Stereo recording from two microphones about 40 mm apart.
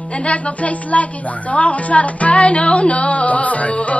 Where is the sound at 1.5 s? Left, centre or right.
Left.